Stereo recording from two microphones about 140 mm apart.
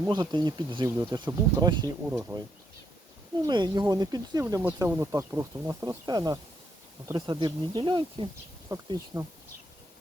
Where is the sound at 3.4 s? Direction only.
30° right (ahead or behind).